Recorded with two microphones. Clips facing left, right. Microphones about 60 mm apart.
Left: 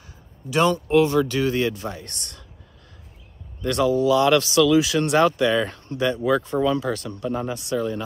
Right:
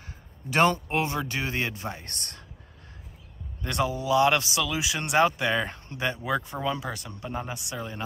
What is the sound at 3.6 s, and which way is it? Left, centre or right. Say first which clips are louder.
Speech: left 8 dB; right.